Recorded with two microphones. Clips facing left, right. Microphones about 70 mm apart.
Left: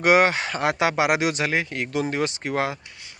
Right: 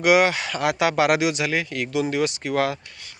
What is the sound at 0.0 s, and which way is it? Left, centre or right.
Speech, left.